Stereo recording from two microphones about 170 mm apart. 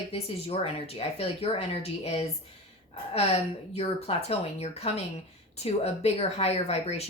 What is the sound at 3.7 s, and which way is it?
Speech, 35° left (ahead or behind).